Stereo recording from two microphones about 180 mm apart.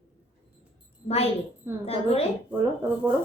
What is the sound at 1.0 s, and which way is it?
A woman's voice, 35° left (ahead or behind).